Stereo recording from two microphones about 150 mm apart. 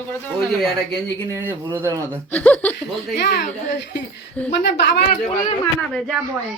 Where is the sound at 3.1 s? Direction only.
90° left.